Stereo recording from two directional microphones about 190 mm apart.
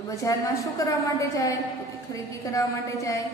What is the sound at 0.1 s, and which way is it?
A woman's voice, 15° left (ahead or behind).